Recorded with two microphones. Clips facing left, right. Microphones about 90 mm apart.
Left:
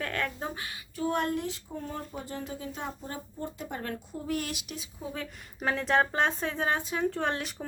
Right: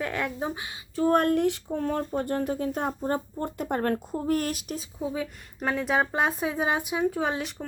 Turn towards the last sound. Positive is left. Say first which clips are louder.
# right 3 dB
turn(degrees=-5)  # may be behind; listen again after turning